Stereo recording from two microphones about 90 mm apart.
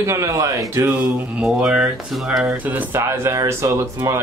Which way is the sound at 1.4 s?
5° right (ahead or behind).